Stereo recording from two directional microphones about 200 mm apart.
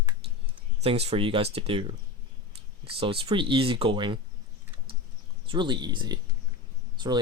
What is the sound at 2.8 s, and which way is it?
Speech, 25° right (ahead or behind).